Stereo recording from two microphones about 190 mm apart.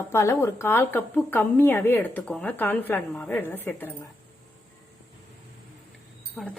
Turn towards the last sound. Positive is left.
turn(degrees=5)  # may be behind; listen again after turning